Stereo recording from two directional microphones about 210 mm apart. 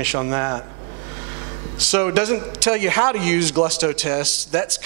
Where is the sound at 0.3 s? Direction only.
20° right (ahead or behind).